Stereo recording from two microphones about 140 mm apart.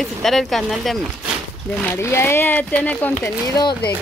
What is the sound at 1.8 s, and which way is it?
Speech, 20° left (ahead or behind).